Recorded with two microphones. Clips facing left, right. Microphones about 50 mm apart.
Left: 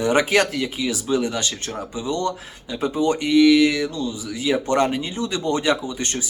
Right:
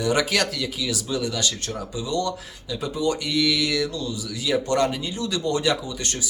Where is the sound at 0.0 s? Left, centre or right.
Left.